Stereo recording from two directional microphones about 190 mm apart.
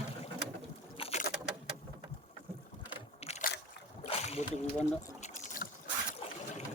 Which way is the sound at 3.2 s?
35° left (ahead or behind).